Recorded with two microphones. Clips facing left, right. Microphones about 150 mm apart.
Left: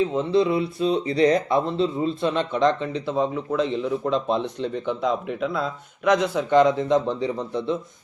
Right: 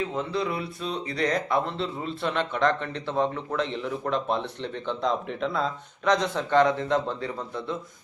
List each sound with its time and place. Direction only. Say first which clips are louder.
0.2 s speech: left 8 dB; 25° left (ahead or behind)